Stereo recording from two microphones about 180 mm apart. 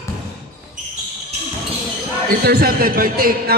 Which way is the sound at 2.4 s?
60° right (ahead or behind).